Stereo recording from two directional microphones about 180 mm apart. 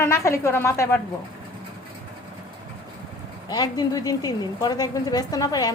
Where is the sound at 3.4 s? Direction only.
20° left (ahead or behind).